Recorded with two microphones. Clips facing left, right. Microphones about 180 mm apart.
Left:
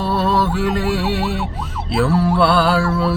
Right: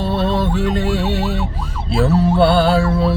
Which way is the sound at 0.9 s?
5° left (ahead or behind).